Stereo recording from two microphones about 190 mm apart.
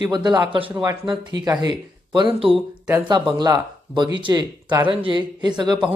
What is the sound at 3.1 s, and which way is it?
Speech, 25° right (ahead or behind).